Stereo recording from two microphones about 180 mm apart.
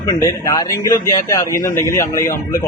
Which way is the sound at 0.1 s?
20° left (ahead or behind).